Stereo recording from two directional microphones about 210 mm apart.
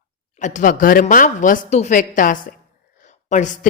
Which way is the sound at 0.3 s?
35° left (ahead or behind).